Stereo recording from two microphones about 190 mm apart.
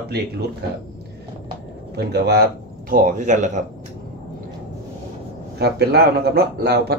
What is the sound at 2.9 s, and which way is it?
Speech, 45° right (ahead or behind).